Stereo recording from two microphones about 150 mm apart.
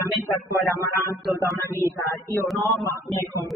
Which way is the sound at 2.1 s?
20° left (ahead or behind).